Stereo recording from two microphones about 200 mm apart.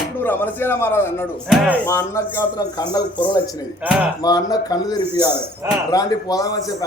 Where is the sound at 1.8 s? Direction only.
15° left (ahead or behind).